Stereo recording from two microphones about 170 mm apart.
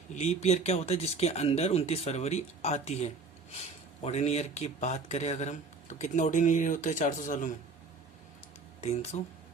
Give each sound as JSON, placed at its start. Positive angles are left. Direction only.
{"t": 0.1, "sound": "speech", "side_deg": 40}
{"t": 8.8, "sound": "speech", "side_deg": 40}